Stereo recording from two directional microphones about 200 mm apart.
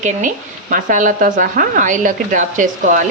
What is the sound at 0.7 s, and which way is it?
A woman's voice, 40° right (ahead or behind).